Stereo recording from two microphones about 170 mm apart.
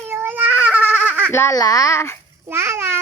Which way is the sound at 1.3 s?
15° left (ahead or behind).